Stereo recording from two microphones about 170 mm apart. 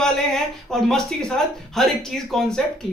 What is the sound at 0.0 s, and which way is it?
A man's voice, 5° left (ahead or behind).